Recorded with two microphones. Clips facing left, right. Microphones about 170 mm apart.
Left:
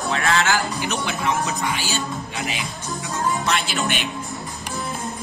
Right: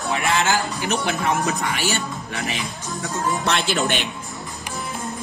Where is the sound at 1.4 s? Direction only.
65° right (ahead or behind).